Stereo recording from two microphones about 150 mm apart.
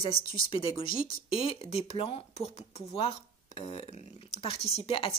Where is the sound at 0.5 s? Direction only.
35° left (ahead or behind).